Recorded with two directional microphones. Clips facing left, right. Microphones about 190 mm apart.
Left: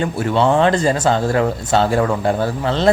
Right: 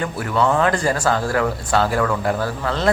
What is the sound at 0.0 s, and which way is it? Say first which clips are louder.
Speech: left 3 dB; 25° left (ahead or behind).